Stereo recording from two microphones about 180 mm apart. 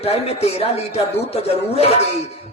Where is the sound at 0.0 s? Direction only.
35° left (ahead or behind).